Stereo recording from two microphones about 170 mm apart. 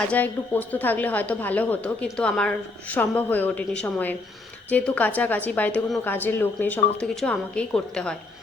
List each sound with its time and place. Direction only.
0.1 s a woman's voice: 10° left (ahead or behind)